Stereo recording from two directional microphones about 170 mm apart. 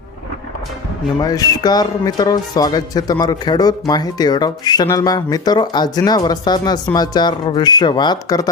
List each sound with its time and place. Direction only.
1.2 s speech: 20° left (ahead or behind)